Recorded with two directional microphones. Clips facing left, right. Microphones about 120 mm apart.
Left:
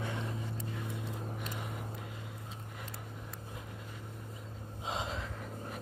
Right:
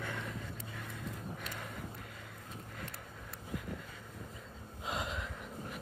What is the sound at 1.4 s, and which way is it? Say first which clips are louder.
Vehicle: left 3 dB; 15° left (ahead or behind).